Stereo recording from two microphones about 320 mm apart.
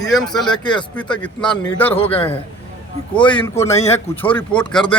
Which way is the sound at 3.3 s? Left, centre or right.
Centre.